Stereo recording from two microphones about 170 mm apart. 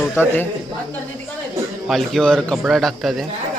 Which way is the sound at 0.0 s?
10° left (ahead or behind).